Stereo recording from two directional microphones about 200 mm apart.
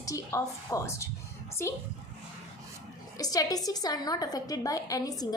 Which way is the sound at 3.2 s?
20° left (ahead or behind).